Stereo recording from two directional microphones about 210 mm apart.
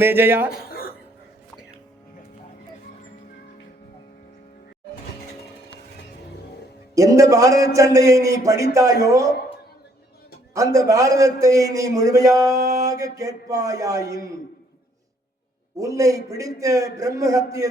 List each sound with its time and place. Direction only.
0.0 s a man's voice: 10° right (ahead or behind)
0.5 s a sound: 45° left (ahead or behind)
6.9 s a man's voice: 15° right (ahead or behind)
10.5 s a man's voice: 15° right (ahead or behind)
15.8 s a man's voice: 15° right (ahead or behind)